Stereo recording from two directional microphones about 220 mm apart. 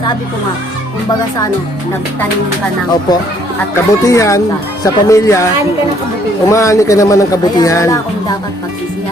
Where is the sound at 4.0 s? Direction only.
15° left (ahead or behind).